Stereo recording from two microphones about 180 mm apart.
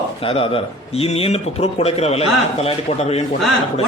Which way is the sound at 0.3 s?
30° left (ahead or behind).